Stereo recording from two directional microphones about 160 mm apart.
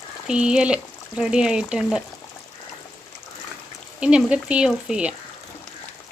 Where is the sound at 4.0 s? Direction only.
5° right (ahead or behind).